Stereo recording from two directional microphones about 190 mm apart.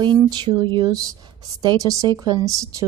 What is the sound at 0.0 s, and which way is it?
A woman's voice, 25° right (ahead or behind).